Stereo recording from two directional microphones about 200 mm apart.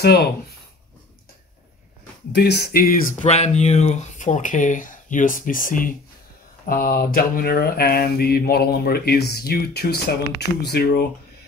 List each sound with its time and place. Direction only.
0.0 s mantra: 55° left (ahead or behind)
2.3 s speech: 55° left (ahead or behind)
6.6 s mantra: 45° left (ahead or behind)